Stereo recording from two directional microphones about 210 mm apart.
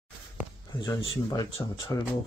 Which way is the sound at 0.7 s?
20° left (ahead or behind).